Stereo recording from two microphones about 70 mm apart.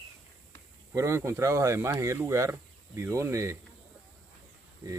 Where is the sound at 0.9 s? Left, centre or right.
Right.